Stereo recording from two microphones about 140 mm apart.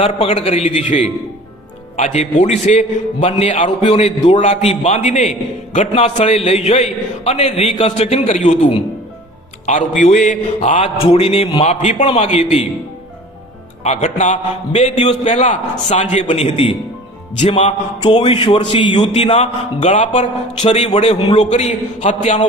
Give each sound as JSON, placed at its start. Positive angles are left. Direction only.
{"t": 0.0, "sound": "a man's voice", "side_deg": 45}
{"t": 9.6, "sound": "a man's voice", "side_deg": 65}
{"t": 11.0, "sound": "a man's voice", "side_deg": 45}
{"t": 13.8, "sound": "a man's voice", "side_deg": 55}
{"t": 19.1, "sound": "a man's voice", "side_deg": 50}